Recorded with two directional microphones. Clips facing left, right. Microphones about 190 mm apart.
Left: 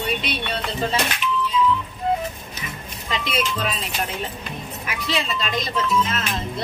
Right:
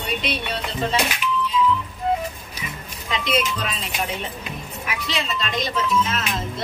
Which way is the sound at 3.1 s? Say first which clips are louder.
Right 2 dB; centre (ahead or behind).